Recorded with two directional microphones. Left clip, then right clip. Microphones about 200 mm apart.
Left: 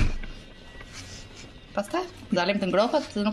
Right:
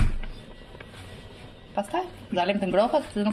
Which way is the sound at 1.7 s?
Centre (ahead or behind).